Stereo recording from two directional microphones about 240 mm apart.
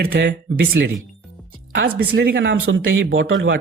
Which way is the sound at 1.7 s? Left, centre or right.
Right.